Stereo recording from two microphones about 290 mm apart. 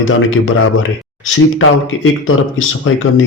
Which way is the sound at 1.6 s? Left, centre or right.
Left.